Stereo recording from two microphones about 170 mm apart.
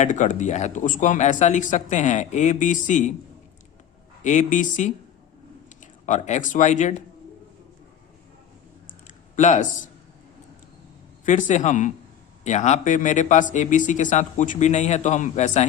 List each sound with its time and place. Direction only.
0.0 s speech: 45° left (ahead or behind)
4.2 s speech: 45° left (ahead or behind)
9.0 s a sound: 45° left (ahead or behind)
11.3 s speech: 45° left (ahead or behind)